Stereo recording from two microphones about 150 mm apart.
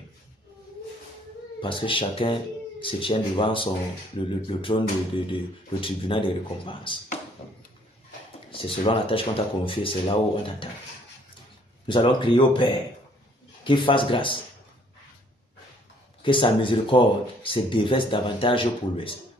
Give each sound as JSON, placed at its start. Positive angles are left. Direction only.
{"t": 1.6, "sound": "speech", "side_deg": 35}
{"t": 8.5, "sound": "speech", "side_deg": 35}
{"t": 11.8, "sound": "speech", "side_deg": 35}
{"t": 16.2, "sound": "speech", "side_deg": 35}